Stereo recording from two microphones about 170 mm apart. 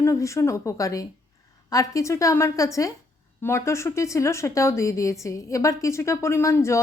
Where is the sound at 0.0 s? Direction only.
20° left (ahead or behind).